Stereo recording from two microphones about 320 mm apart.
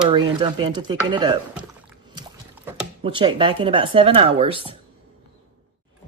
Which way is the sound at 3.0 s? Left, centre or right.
Centre.